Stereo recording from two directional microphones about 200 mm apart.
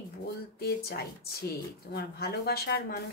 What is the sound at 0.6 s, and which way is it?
Speech, 50° left (ahead or behind).